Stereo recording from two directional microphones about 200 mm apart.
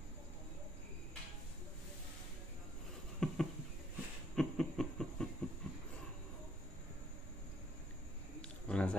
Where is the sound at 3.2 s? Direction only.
5° left (ahead or behind).